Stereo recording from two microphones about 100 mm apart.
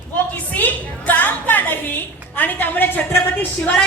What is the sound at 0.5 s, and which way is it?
A woman's voice, 20° left (ahead or behind).